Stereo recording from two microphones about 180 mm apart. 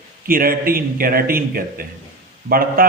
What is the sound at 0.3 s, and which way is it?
A man's voice, 55° right (ahead or behind).